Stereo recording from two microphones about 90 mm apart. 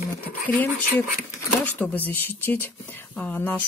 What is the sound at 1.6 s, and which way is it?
Speech, 20° left (ahead or behind).